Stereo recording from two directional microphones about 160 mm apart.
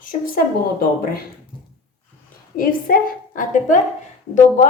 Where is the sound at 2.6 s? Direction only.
60° left (ahead or behind).